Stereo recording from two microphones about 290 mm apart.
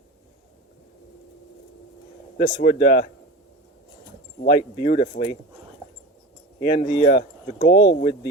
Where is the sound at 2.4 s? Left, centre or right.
Left.